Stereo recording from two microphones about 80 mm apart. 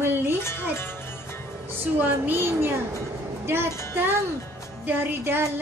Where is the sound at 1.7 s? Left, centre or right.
Right.